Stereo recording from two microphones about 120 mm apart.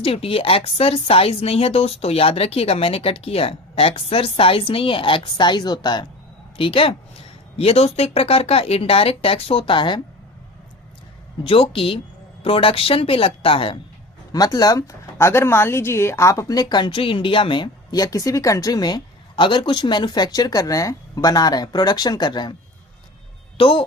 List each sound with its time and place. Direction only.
0.0 s speech: 50° left (ahead or behind)
6.6 s speech: 50° left (ahead or behind)
11.4 s speech: 50° left (ahead or behind)
14.3 s speech: 30° left (ahead or behind)
23.6 s speech: 45° left (ahead or behind)